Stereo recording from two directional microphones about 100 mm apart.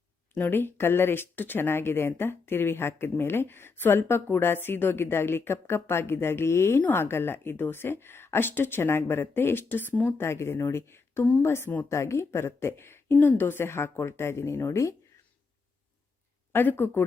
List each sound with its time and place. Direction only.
0.3 s speech: 20° left (ahead or behind)
16.5 s speech: 20° left (ahead or behind)